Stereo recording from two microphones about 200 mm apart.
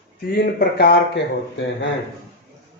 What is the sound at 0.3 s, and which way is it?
Speech, 55° left (ahead or behind).